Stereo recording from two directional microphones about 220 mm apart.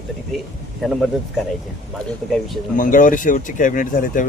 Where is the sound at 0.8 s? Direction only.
Centre (ahead or behind).